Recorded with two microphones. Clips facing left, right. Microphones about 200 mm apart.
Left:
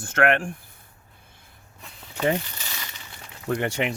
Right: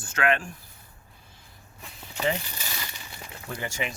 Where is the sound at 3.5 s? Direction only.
65° left (ahead or behind).